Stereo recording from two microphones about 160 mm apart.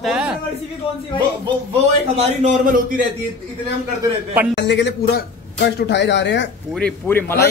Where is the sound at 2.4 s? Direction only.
50° right (ahead or behind).